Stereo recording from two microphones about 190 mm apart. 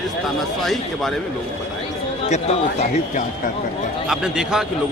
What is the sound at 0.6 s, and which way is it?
Speech, centre (ahead or behind).